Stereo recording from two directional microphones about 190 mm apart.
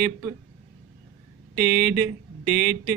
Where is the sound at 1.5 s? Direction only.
50° right (ahead or behind).